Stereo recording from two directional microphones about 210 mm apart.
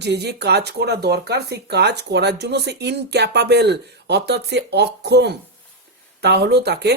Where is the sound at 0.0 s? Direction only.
55° right (ahead or behind).